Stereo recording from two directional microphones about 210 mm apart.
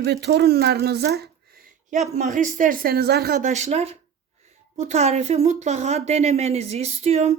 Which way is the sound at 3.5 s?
30° right (ahead or behind).